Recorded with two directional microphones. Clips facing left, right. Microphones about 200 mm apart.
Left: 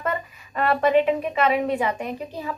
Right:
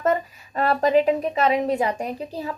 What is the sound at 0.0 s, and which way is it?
A woman's voice, 40° right (ahead or behind).